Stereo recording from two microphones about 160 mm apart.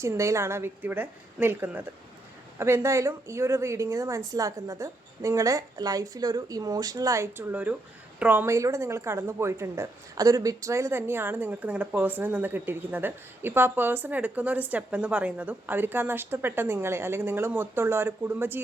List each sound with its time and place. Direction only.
0.0 s a woman's voice: 20° right (ahead or behind)